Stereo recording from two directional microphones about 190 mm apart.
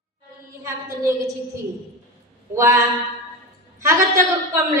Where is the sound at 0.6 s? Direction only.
15° right (ahead or behind).